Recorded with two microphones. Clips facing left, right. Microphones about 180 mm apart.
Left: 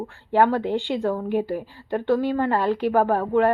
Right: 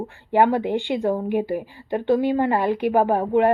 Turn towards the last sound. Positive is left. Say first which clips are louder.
# right 1 dB
turn(degrees=-15)  # may be behind; listen again after turning